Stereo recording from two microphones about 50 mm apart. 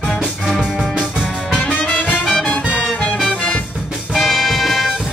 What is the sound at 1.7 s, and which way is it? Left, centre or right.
Music, left.